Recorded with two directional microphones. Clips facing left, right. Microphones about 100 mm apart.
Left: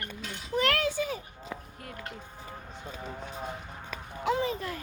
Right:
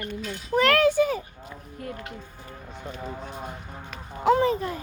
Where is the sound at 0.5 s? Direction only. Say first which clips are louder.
Right 8 dB; 60° right (ahead or behind).